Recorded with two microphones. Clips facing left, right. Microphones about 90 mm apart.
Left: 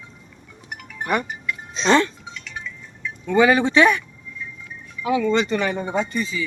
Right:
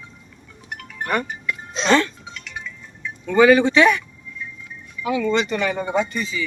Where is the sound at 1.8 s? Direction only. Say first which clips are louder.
Left 1 dB; 25° left (ahead or behind).